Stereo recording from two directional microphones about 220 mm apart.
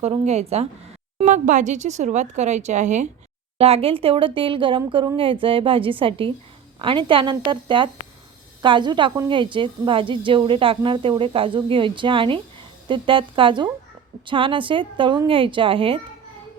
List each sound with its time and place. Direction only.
0.0 s a woman's voice: 30° right (ahead or behind)